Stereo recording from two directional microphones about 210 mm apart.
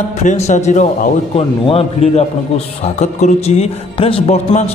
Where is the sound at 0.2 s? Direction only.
35° left (ahead or behind).